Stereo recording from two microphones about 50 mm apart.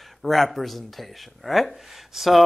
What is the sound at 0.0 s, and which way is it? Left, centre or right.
A man's voice, centre.